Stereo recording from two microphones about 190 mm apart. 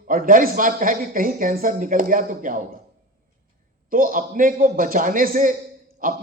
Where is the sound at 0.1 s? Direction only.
45° right (ahead or behind).